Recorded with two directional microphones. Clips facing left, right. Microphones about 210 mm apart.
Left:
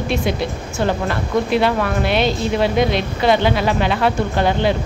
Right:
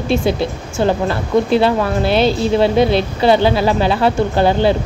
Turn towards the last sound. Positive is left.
turn(degrees=-30)  # may be behind; listen again after turning